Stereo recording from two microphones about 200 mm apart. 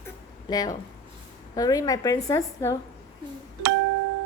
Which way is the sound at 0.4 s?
20° left (ahead or behind).